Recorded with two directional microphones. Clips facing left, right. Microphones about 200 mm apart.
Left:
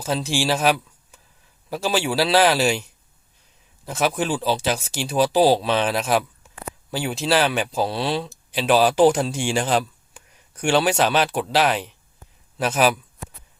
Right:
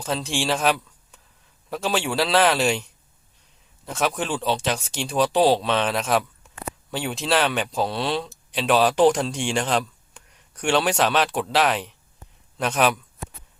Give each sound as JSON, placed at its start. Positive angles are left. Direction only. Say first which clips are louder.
{"t": 0.0, "sound": "a man's voice", "louder": "left 2 dB", "side_deg": 5}